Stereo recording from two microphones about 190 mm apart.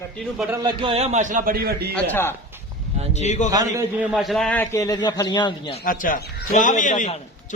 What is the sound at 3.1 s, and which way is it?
Speech, 40° left (ahead or behind).